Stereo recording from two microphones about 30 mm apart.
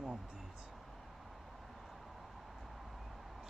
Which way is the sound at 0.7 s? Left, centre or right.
Centre.